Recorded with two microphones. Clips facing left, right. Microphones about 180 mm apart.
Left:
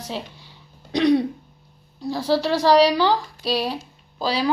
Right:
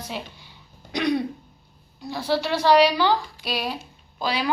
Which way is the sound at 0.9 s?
30° left (ahead or behind).